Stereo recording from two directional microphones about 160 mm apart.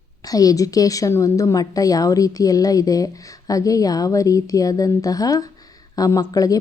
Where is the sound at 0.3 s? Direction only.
25° left (ahead or behind).